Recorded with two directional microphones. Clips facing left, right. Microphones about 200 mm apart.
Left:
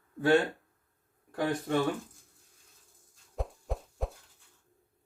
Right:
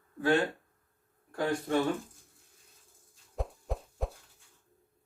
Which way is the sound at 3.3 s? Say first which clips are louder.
Even; centre (ahead or behind).